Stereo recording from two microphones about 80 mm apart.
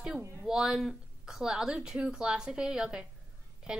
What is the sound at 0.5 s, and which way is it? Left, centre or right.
Speech, centre.